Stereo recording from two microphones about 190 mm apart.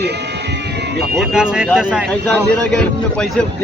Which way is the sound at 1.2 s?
5° right (ahead or behind).